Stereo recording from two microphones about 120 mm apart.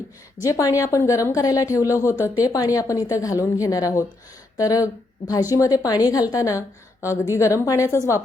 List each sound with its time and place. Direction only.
0.4 s a woman's voice: 25° left (ahead or behind)